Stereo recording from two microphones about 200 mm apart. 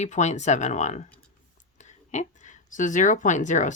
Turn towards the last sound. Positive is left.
turn(degrees=40)  # may be behind; listen again after turning